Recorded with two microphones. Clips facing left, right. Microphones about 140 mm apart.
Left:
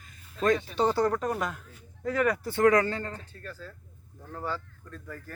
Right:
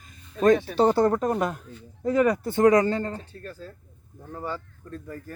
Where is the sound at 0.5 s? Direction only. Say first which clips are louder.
Right 6 dB; 65° right (ahead or behind).